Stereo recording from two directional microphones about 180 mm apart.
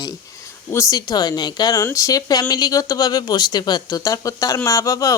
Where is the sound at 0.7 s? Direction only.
20° left (ahead or behind).